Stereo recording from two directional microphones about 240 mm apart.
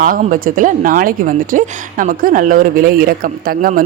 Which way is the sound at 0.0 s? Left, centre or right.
Right.